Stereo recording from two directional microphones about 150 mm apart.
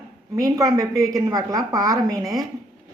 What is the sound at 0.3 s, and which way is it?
A woman's voice, 20° right (ahead or behind).